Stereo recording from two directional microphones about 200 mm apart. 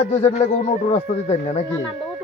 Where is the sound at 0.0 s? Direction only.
35° left (ahead or behind).